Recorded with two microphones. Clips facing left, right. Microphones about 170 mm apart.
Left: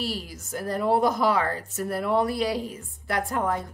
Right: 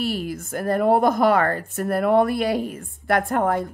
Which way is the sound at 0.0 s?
55° right (ahead or behind).